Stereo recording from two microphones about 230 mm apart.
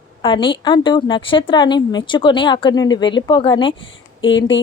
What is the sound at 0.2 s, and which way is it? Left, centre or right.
A woman's voice, left.